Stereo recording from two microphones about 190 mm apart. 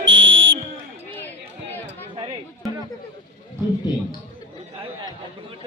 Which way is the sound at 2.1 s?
25° right (ahead or behind).